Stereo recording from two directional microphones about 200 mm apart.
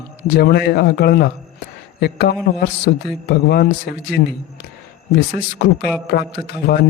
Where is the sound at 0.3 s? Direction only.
50° left (ahead or behind).